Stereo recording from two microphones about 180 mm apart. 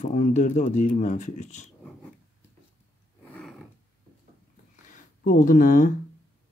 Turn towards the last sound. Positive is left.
turn(degrees=45)  # may be behind; listen again after turning